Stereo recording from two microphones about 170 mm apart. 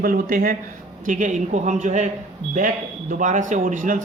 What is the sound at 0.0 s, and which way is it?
A man's voice, 55° right (ahead or behind).